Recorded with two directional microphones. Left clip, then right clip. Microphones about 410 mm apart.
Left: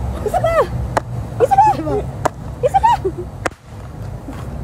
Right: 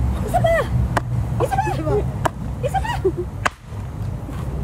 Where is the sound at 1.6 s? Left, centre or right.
Centre.